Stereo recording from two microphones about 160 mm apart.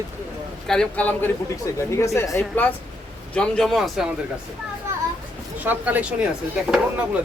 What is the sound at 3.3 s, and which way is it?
Speech, 5° left (ahead or behind).